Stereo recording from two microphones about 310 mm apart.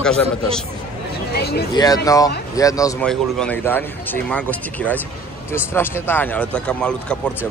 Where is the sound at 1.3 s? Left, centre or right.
Left.